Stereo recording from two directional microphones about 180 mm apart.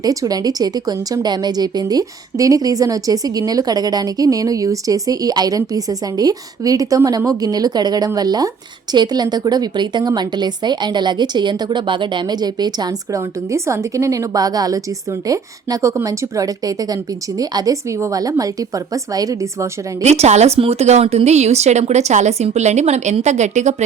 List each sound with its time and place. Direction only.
0.0 s a woman's voice: 20° right (ahead or behind)
20.0 s speech: 35° right (ahead or behind)